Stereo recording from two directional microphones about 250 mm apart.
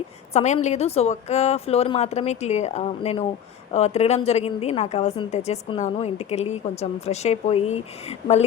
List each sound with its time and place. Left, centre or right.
0.3 s a woman's voice: left